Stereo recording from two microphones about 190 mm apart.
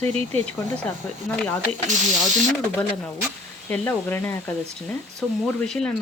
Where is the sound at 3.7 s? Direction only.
10° left (ahead or behind).